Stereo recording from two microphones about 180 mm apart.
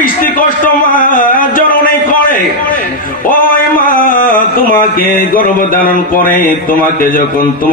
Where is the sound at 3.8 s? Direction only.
50° left (ahead or behind).